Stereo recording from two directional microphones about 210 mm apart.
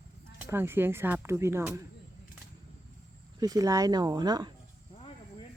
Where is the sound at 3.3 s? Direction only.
15° right (ahead or behind).